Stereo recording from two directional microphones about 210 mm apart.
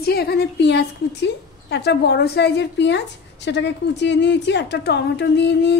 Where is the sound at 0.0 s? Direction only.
50° left (ahead or behind).